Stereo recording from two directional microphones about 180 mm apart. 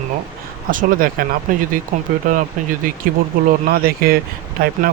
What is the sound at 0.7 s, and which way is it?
Speech, 50° right (ahead or behind).